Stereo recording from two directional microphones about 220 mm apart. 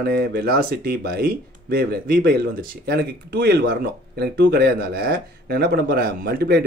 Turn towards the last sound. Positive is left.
turn(degrees=-45)  # may be behind; listen again after turning